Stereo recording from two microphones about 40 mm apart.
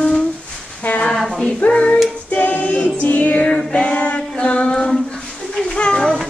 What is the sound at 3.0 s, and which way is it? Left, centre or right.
Music, left.